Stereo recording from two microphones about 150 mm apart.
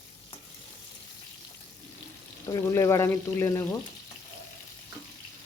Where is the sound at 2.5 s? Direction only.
20° left (ahead or behind).